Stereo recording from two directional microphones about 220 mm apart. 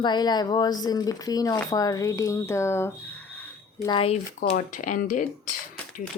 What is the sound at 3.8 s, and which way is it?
Speech, 25° left (ahead or behind).